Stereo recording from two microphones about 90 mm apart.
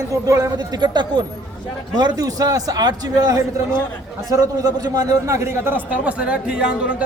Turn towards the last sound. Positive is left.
turn(degrees=-10)  # may be behind; listen again after turning